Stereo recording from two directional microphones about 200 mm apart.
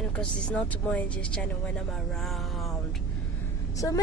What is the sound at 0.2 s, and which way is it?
Speech, 5° left (ahead or behind).